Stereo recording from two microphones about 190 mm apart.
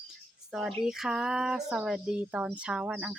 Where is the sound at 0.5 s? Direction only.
Centre (ahead or behind).